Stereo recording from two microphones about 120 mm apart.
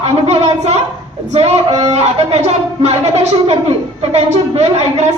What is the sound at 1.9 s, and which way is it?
A woman's voice, 65° right (ahead or behind).